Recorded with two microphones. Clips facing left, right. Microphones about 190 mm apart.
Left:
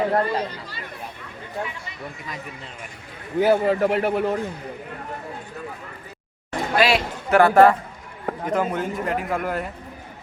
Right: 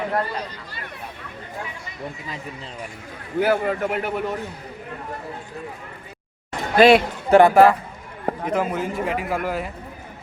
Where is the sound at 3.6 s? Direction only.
35° left (ahead or behind).